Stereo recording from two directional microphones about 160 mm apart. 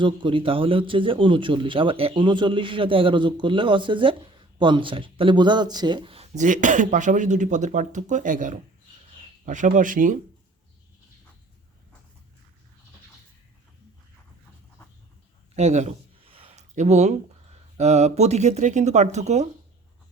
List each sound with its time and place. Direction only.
0.0 s a man's voice: 30° right (ahead or behind); by 10.2 s 55° right (ahead or behind)
15.5 s speech: 45° right (ahead or behind)